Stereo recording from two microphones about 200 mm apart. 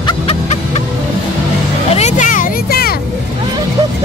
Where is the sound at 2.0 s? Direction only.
35° left (ahead or behind).